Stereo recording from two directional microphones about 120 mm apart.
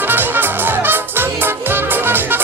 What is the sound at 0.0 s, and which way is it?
Music, 15° right (ahead or behind).